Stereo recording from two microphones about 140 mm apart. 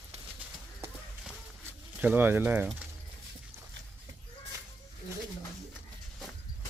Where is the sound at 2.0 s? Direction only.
15° right (ahead or behind).